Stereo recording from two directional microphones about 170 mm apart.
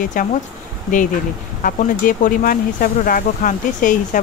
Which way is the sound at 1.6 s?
50° left (ahead or behind).